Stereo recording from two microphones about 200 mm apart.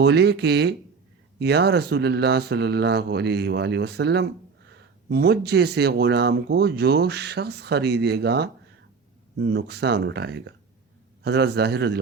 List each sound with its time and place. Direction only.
0.0 s speech: 55° right (ahead or behind)
9.5 s speech: 55° right (ahead or behind)